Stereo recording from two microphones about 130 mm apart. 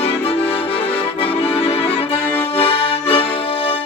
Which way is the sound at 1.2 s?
50° left (ahead or behind).